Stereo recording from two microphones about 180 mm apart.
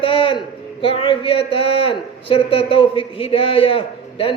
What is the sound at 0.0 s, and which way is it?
A man's voice, 30° left (ahead or behind).